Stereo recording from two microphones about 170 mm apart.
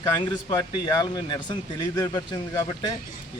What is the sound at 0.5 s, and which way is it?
Speech, 25° left (ahead or behind).